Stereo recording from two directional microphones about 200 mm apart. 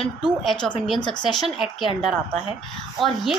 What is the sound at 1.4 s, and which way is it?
Speech, centre (ahead or behind).